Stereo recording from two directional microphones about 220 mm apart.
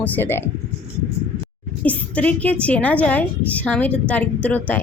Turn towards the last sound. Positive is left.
turn(degrees=5)  # may be behind; listen again after turning